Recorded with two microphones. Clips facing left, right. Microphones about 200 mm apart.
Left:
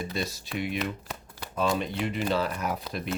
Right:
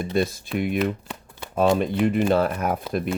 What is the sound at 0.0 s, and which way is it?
Speech, 55° right (ahead or behind).